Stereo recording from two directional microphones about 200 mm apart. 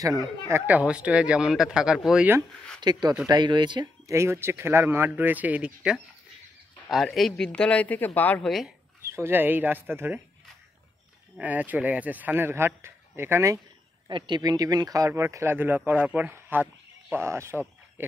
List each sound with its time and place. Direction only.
0.0 s speech: 20° right (ahead or behind)
2.8 s speech: 20° right (ahead or behind); by 8.7 s centre (ahead or behind)
9.0 s speech: 15° right (ahead or behind)
11.3 s speech: 10° right (ahead or behind)